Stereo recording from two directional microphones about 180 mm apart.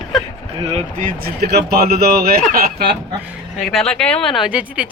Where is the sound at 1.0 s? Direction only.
60° right (ahead or behind).